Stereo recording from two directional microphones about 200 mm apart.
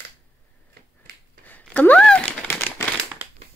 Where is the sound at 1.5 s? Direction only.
10° left (ahead or behind).